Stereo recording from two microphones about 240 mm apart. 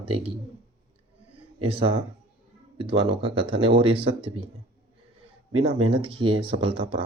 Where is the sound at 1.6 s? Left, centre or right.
Right.